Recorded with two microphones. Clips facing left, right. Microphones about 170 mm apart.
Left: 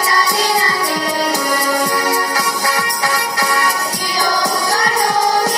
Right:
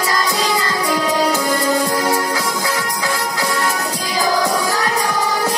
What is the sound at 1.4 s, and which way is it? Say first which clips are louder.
Music: even; 70° left (ahead or behind).